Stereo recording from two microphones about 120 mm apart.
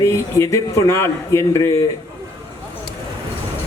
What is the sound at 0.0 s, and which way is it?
Speech, 25° left (ahead or behind).